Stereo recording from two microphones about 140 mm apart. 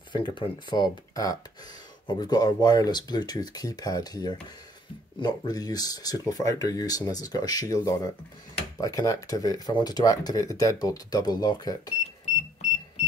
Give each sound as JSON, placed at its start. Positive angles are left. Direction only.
{"t": 0.1, "sound": "speech", "side_deg": 35}